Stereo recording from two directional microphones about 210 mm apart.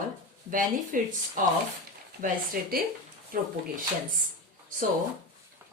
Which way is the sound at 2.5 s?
45° right (ahead or behind).